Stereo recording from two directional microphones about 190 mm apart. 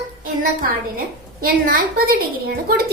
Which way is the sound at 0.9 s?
50° right (ahead or behind).